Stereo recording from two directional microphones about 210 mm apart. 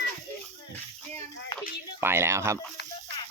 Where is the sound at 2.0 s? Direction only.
10° right (ahead or behind).